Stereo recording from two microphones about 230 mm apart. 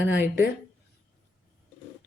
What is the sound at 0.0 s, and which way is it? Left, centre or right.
Speech, left.